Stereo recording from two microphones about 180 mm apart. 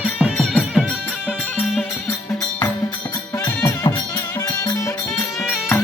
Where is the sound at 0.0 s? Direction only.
5° right (ahead or behind).